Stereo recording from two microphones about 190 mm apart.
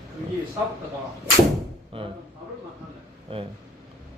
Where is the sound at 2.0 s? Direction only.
30° right (ahead or behind).